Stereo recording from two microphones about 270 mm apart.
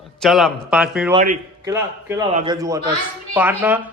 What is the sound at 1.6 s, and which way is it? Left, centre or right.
A man's voice, centre.